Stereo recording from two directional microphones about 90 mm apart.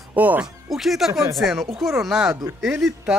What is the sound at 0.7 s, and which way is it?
Speech, centre (ahead or behind).